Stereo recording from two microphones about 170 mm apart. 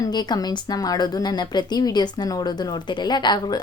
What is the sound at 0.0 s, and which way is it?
Speech, 25° left (ahead or behind).